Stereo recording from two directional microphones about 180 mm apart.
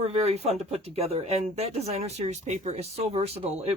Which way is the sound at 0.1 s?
35° right (ahead or behind).